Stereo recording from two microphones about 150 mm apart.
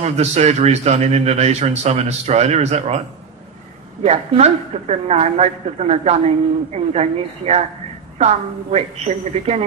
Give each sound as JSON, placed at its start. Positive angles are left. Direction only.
{"t": 0.0, "sound": "speech", "side_deg": -45}
{"t": 4.0, "sound": "speech", "side_deg": -45}